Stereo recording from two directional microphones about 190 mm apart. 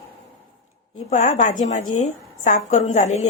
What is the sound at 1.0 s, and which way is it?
A woman's voice, 40° left (ahead or behind).